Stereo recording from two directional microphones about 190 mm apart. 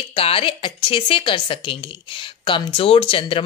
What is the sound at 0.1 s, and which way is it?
Speech, 30° left (ahead or behind).